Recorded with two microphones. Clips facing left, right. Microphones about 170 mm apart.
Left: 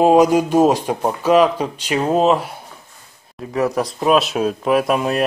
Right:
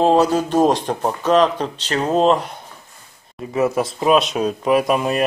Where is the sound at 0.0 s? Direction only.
10° left (ahead or behind).